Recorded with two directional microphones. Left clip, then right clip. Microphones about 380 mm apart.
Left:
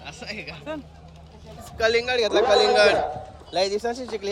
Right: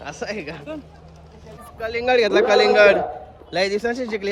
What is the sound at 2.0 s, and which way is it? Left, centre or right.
A man's voice, centre.